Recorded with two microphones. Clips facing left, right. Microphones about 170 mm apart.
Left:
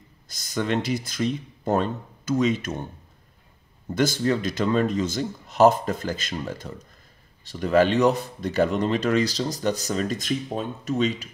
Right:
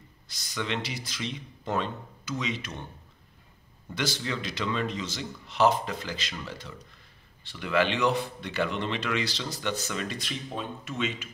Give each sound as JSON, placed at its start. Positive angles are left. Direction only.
{"t": 0.3, "sound": "speech", "side_deg": 45}
{"t": 3.9, "sound": "speech", "side_deg": 45}